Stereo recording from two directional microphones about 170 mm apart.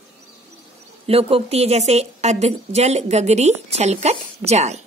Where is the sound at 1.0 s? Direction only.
35° right (ahead or behind).